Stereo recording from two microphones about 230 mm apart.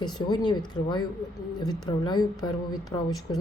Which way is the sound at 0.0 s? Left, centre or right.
Centre.